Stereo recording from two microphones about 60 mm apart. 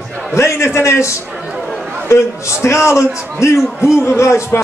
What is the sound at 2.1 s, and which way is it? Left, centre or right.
A man's voice, left.